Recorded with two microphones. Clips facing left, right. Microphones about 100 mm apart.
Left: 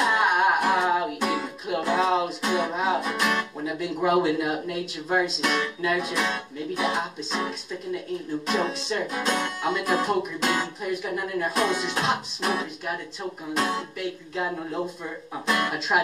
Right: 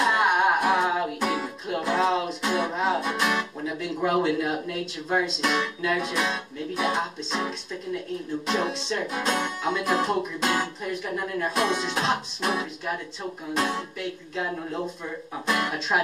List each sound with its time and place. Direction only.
0.0 s music: 5° left (ahead or behind)
3.6 s speech: 10° left (ahead or behind)